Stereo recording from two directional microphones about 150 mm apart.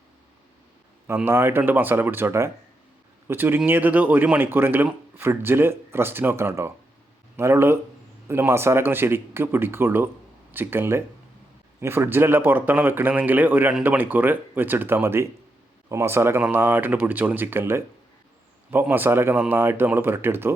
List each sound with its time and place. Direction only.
1.0 s a man's voice: 15° right (ahead or behind)